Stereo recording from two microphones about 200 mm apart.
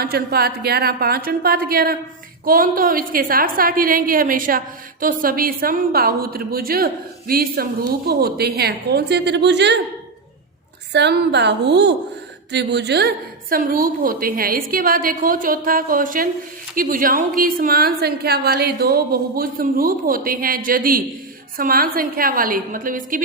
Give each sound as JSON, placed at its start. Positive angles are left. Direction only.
{"t": 0.0, "sound": "a woman's voice", "side_deg": -50}
{"t": 10.9, "sound": "a woman's voice", "side_deg": -60}